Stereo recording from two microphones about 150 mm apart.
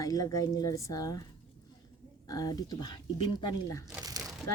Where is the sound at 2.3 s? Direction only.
25° left (ahead or behind).